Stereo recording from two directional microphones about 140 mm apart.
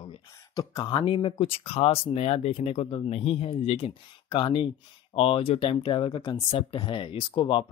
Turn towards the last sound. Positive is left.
turn(degrees=35)  # may be behind; listen again after turning